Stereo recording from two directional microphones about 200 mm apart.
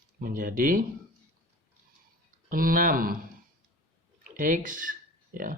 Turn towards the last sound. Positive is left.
turn(degrees=-45)  # may be behind; listen again after turning